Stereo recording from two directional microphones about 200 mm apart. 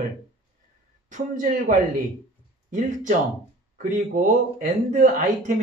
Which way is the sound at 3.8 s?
40° right (ahead or behind).